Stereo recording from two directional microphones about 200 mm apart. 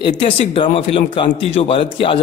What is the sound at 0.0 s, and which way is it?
Speech, 25° left (ahead or behind).